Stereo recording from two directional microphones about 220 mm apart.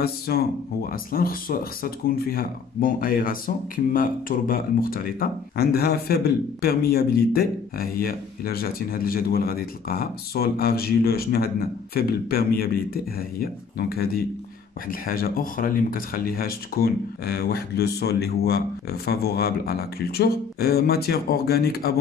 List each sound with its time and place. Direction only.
0.3 s speech: 45° left (ahead or behind)